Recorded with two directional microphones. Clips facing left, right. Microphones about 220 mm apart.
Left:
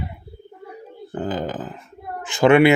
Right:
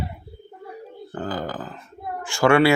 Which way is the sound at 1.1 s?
20° left (ahead or behind).